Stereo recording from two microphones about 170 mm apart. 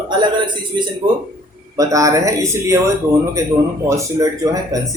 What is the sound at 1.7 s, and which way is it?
A man's voice, 20° right (ahead or behind).